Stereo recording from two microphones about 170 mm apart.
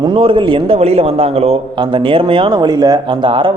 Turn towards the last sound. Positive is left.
turn(degrees=-30)  # may be behind; listen again after turning